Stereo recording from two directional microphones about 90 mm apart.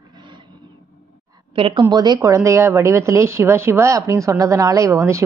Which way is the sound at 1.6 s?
90° right.